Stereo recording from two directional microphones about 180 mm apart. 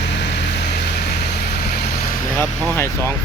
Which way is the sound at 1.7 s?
60° left (ahead or behind).